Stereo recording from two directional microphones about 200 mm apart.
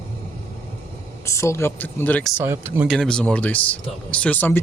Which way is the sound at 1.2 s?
15° left (ahead or behind).